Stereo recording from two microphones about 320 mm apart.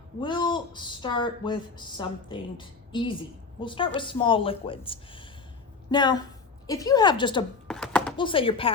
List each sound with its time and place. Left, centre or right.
0.2 s speech: centre
7.7 s a sound: centre
8.1 s speech: centre